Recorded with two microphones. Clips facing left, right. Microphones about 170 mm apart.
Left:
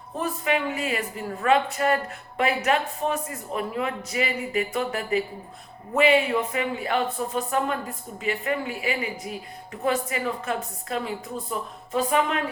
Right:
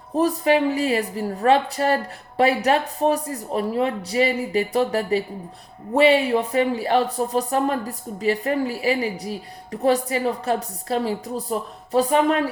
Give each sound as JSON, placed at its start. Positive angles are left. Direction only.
{"t": 0.2, "sound": "speech", "side_deg": -35}